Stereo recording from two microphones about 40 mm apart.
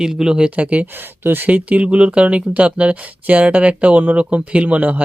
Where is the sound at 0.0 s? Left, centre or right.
Centre.